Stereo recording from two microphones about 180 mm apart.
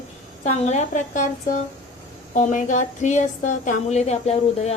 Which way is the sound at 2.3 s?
45° left (ahead or behind).